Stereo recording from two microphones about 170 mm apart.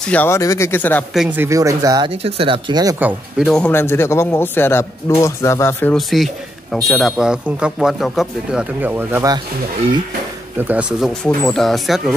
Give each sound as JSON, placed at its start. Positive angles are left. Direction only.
{"t": 0.1, "sound": "speech", "side_deg": 10}
{"t": 1.1, "sound": "speech", "side_deg": -5}
{"t": 3.0, "sound": "speech", "side_deg": -5}
{"t": 5.9, "sound": "speech", "side_deg": 0}
{"t": 10.7, "sound": "speech", "side_deg": -5}